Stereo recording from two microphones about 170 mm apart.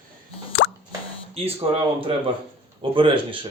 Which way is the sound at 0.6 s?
90° left.